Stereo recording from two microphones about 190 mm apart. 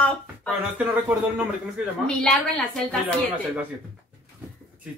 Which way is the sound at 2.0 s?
5° left (ahead or behind).